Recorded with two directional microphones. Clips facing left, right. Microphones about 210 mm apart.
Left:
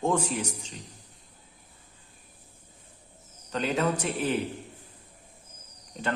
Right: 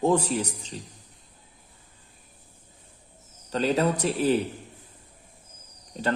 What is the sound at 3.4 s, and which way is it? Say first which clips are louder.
Speech: right 3 dB; 35° right (ahead or behind).